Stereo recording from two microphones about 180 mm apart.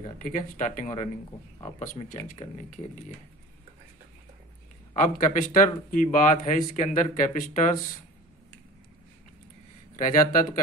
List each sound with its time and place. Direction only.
0.2 s speech: 45° left (ahead or behind)
5.3 s speech: 45° left (ahead or behind)
9.9 s speech: 45° left (ahead or behind)